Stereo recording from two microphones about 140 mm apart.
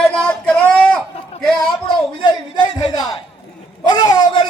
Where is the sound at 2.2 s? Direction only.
30° left (ahead or behind).